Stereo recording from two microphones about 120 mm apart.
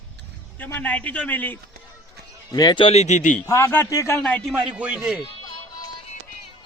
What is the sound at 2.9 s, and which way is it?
Speech, 70° left (ahead or behind).